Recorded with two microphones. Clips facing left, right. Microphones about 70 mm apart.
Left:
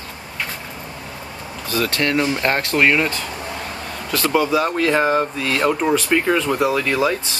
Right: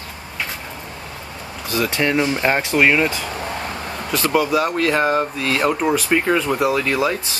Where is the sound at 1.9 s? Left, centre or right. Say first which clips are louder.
Right 1 dB; centre.